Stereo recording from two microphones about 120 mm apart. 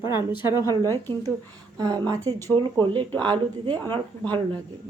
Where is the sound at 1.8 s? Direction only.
30° right (ahead or behind).